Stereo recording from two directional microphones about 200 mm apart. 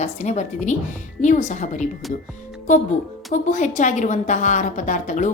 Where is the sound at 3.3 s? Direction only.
40° left (ahead or behind).